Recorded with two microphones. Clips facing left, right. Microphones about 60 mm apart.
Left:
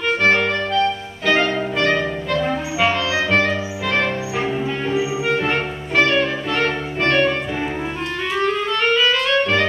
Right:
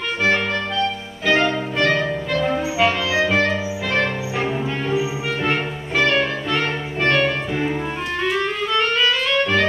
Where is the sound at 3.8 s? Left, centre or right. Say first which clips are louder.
Left 1 dB; centre.